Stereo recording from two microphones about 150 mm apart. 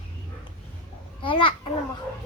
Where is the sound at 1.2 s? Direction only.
35° left (ahead or behind).